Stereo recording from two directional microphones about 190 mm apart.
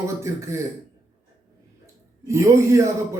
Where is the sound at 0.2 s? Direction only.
15° right (ahead or behind).